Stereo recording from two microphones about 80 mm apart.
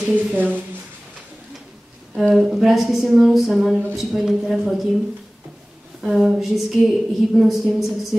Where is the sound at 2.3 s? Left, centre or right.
Centre.